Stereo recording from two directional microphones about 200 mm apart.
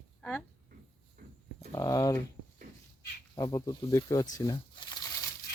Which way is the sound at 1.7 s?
15° left (ahead or behind).